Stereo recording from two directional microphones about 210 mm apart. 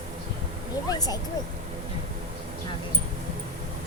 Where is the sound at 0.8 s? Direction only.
20° left (ahead or behind).